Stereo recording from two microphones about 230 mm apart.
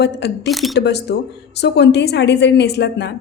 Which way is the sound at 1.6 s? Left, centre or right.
Left.